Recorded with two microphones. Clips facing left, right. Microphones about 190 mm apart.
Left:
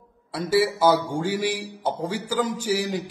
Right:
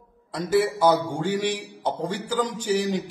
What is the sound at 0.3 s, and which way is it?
A man's voice, 10° left (ahead or behind).